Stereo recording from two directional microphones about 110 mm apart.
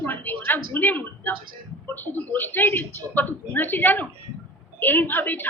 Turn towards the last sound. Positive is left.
turn(degrees=15)  # may be behind; listen again after turning